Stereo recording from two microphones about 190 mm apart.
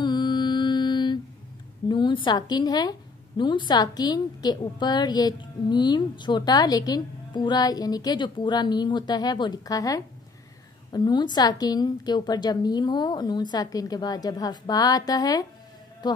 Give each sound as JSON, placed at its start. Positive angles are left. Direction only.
{"t": 0.0, "sound": "mantra", "side_deg": 25}
{"t": 1.9, "sound": "a woman's voice", "side_deg": 25}